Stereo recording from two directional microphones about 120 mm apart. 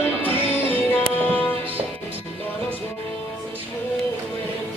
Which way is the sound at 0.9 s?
15° left (ahead or behind).